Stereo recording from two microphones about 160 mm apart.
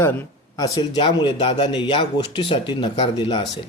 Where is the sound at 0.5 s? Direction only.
25° left (ahead or behind).